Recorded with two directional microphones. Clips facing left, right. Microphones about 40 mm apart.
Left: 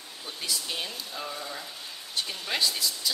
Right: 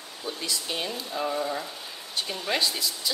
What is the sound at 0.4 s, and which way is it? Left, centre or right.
Speech, centre.